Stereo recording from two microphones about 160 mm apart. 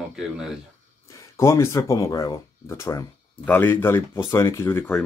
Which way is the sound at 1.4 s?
20° left (ahead or behind).